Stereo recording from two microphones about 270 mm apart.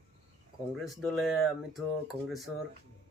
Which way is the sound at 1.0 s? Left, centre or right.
Centre.